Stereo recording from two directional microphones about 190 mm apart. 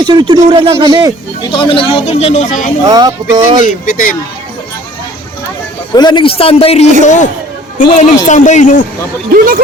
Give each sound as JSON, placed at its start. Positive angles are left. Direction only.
{"t": 0.0, "sound": "speech", "side_deg": -25}
{"t": 1.5, "sound": "speech", "side_deg": 25}
{"t": 2.8, "sound": "speech", "side_deg": -20}
{"t": 3.6, "sound": "speech", "side_deg": 45}
{"t": 5.9, "sound": "a man's voice", "side_deg": 20}
{"t": 9.3, "sound": "speech", "side_deg": -50}